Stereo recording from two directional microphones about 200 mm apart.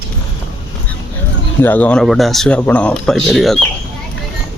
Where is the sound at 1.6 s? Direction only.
10° left (ahead or behind).